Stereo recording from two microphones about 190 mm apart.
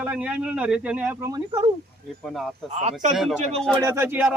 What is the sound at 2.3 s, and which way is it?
Speech, centre (ahead or behind).